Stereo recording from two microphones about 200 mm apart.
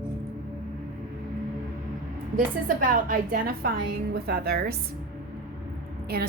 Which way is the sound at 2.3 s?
45° right (ahead or behind).